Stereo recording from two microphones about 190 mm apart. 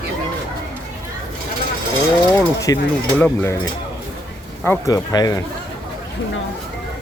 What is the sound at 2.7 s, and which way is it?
Speech, 20° left (ahead or behind).